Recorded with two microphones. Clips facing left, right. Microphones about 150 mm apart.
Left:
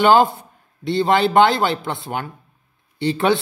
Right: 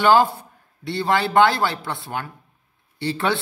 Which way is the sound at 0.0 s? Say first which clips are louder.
Left 2 dB; 20° left (ahead or behind).